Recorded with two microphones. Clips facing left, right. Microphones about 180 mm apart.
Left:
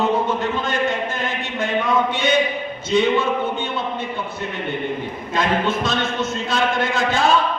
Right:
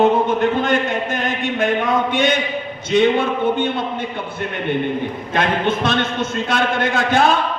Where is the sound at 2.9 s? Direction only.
60° right (ahead or behind).